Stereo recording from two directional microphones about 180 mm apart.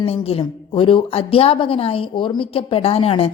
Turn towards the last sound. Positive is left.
turn(degrees=35)  # may be behind; listen again after turning